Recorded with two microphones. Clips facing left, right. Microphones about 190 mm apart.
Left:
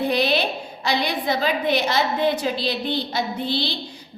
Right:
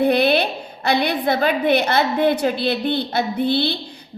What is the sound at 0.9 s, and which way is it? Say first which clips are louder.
A woman's voice: right 4 dB; 60° right (ahead or behind).